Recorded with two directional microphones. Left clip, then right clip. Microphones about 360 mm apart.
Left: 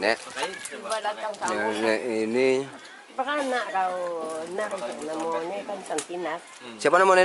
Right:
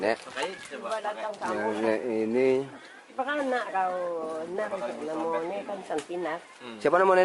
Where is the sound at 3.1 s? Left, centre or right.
Centre.